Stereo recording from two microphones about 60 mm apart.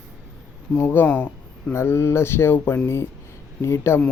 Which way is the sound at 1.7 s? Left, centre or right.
Left.